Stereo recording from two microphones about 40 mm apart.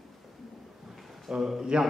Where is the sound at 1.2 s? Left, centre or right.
Centre.